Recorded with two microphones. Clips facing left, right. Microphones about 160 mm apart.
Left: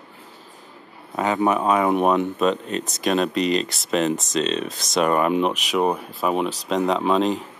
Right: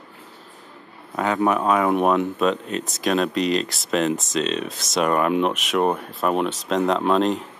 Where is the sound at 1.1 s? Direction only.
Centre (ahead or behind).